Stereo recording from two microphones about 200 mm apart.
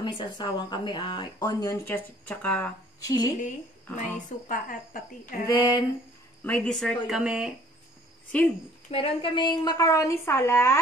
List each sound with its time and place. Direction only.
0.0 s speech: 20° left (ahead or behind)
3.9 s speech: 40° left (ahead or behind)
5.6 s speech: 20° left (ahead or behind)
6.4 s speech: 5° left (ahead or behind)
8.9 s a woman's voice: 25° left (ahead or behind)